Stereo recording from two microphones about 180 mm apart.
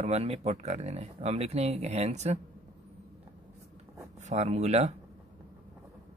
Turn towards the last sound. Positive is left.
turn(degrees=-40)  # may be behind; listen again after turning